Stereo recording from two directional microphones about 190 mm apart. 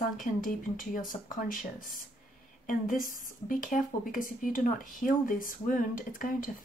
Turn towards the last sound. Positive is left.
turn(degrees=45)  # may be behind; listen again after turning